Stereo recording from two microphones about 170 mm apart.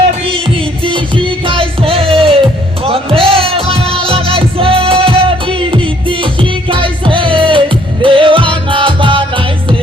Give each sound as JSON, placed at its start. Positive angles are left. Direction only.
{"t": 0.9, "sound": "music", "side_deg": -30}